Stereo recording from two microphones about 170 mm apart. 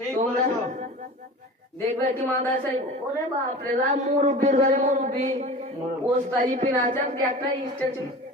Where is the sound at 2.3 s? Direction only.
10° left (ahead or behind).